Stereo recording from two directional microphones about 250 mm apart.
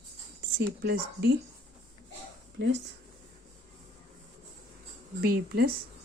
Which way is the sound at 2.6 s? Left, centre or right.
Right.